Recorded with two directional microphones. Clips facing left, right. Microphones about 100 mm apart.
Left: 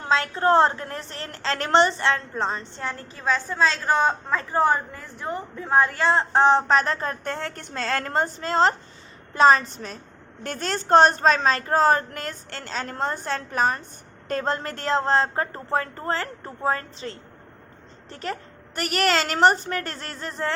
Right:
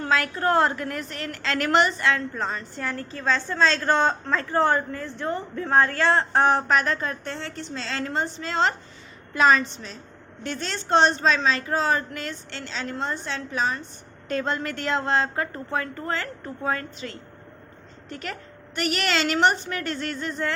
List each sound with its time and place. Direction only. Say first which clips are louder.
0.0 s a woman's voice: left 2 dB; 25° left (ahead or behind)